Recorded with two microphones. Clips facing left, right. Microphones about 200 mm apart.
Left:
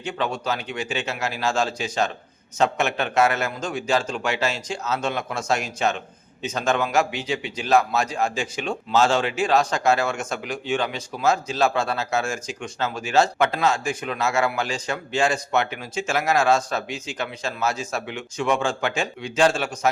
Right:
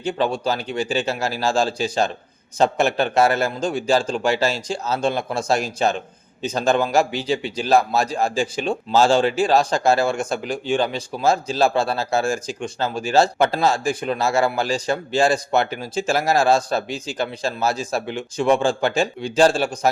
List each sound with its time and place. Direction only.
0.0 s a man's voice: 35° right (ahead or behind)